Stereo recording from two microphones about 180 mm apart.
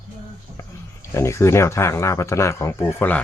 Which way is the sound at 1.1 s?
15° left (ahead or behind).